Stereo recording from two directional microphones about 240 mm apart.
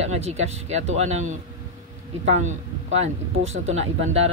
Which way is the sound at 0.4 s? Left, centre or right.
Right.